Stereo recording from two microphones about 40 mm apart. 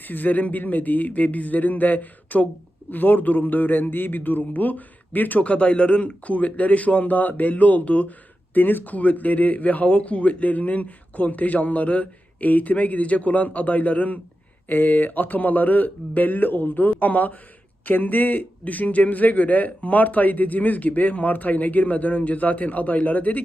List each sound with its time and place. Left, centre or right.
0.0 s a man's voice: left
5.4 s a man's voice: left
14.7 s a man's voice: left